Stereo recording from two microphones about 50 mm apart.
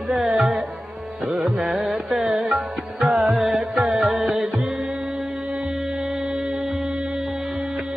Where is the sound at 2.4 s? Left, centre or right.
Centre.